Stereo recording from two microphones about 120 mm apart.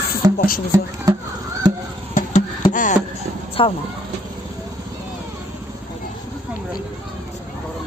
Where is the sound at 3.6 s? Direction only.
50° left (ahead or behind).